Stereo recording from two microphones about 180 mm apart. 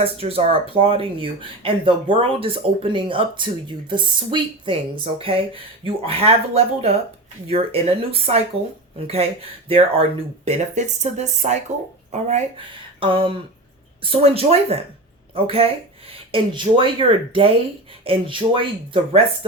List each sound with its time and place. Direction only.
0.0 s speech: 35° right (ahead or behind)